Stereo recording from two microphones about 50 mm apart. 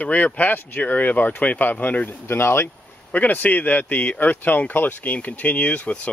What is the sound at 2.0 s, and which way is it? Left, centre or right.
Speech, left.